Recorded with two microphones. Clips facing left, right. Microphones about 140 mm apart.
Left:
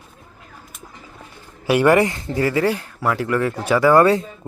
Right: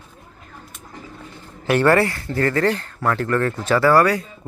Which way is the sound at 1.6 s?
10° left (ahead or behind).